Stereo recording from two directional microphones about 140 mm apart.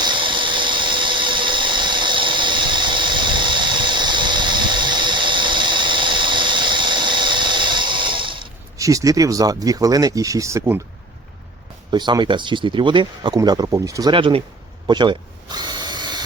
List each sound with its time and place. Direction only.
0.0 s engine: 35° right (ahead or behind)
8.8 s speech: 25° right (ahead or behind)
11.9 s speech: 30° right (ahead or behind)
14.1 s speech: 35° right (ahead or behind)
14.8 s tools: 35° right (ahead or behind)